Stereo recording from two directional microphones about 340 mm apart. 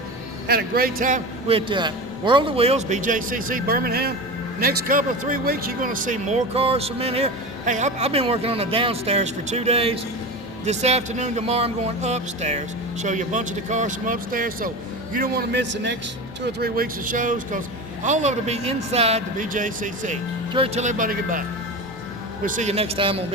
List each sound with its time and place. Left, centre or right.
0.4 s a man's voice: right
22.4 s speech: right